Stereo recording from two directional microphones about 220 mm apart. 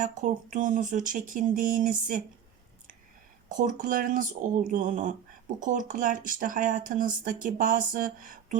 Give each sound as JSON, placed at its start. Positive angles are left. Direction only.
{"t": 0.0, "sound": "speech", "side_deg": -35}
{"t": 3.5, "sound": "speech", "side_deg": -35}